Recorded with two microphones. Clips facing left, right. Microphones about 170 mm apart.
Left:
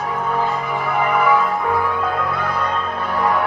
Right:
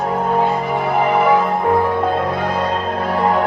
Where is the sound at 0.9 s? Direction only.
30° right (ahead or behind).